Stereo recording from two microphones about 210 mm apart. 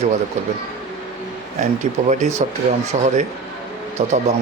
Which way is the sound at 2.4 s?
30° right (ahead or behind).